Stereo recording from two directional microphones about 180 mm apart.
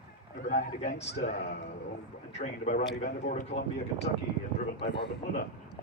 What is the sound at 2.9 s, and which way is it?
Speech, 55° left (ahead or behind).